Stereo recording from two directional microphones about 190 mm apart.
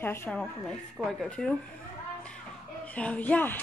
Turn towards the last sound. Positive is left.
turn(degrees=10)  # may be behind; listen again after turning